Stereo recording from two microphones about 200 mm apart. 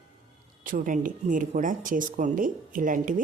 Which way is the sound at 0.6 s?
40° right (ahead or behind).